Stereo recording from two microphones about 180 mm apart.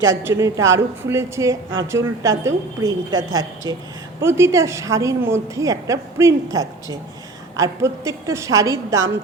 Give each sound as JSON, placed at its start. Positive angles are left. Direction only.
{"t": 0.0, "sound": "a woman's voice", "side_deg": -15}